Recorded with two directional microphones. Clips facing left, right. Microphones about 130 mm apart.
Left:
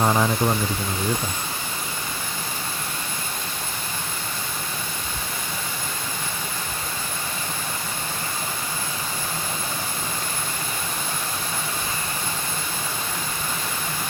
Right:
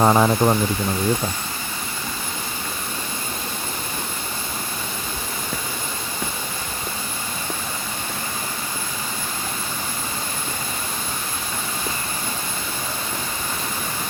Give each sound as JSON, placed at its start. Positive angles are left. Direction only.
{"t": 0.0, "sound": "speech", "side_deg": -55}